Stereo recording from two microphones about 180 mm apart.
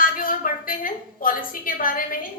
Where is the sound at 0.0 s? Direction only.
50° left (ahead or behind).